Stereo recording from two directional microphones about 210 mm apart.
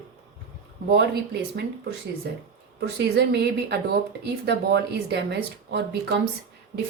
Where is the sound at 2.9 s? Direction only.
55° right (ahead or behind).